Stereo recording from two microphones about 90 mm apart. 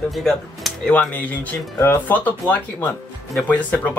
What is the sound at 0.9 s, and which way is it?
Speech, 15° left (ahead or behind).